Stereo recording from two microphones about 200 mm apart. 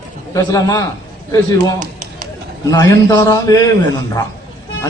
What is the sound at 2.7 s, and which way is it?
Speech, 20° left (ahead or behind).